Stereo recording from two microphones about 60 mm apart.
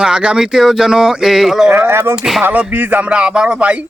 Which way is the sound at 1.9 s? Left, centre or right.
Right.